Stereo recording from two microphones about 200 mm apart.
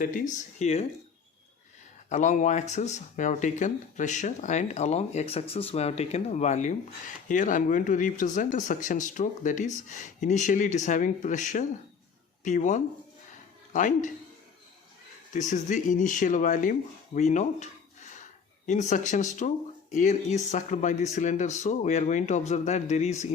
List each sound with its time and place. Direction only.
0.0 s speech: 45° left (ahead or behind)
2.0 s speech: 35° left (ahead or behind)
15.3 s speech: 35° left (ahead or behind)